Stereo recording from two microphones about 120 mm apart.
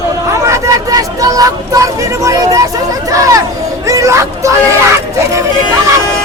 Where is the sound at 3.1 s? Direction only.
30° right (ahead or behind).